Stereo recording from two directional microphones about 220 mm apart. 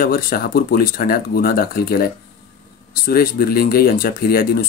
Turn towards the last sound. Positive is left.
turn(degrees=45)  # may be behind; listen again after turning